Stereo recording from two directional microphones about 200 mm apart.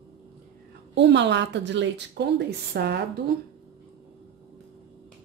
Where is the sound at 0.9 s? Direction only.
60° right (ahead or behind).